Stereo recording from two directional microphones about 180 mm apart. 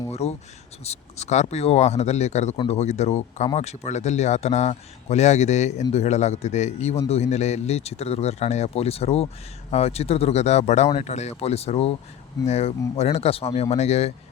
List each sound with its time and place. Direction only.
0.1 s speech: 35° left (ahead or behind)